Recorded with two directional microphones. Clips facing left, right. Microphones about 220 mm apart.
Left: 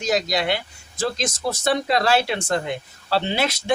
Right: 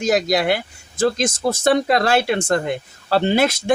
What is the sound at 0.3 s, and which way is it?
Speech, 50° right (ahead or behind).